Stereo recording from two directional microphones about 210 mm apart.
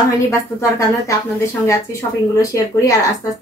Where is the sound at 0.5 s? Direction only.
15° left (ahead or behind).